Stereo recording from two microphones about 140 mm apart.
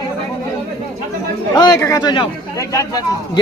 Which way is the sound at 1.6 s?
25° left (ahead or behind).